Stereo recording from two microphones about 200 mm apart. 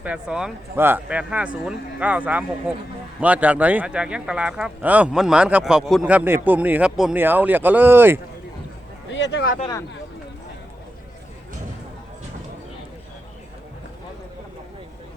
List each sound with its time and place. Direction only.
0.0 s a man's voice: 5° right (ahead or behind)
9.0 s speech: 65° left (ahead or behind)